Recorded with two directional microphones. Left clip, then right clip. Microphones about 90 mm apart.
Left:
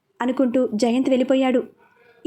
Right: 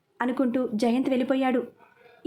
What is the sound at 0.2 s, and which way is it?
A woman's voice, 25° left (ahead or behind).